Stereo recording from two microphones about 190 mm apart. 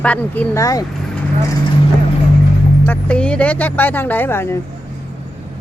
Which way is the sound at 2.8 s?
10° left (ahead or behind).